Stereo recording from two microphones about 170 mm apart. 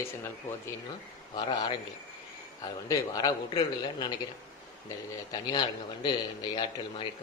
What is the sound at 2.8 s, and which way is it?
A man's voice, 25° left (ahead or behind).